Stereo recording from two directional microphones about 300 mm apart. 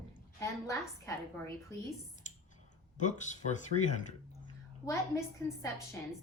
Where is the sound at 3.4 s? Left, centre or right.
Left.